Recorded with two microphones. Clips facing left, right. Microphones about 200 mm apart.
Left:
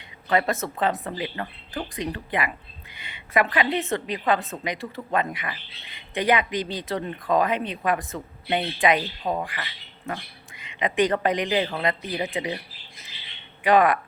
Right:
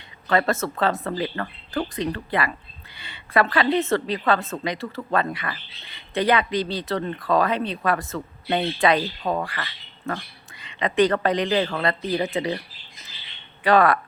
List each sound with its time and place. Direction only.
0.3 s speech: 15° left (ahead or behind)
13.7 s speech: 15° left (ahead or behind)